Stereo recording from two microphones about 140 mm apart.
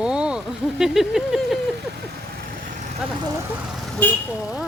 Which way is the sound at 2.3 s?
70° right (ahead or behind).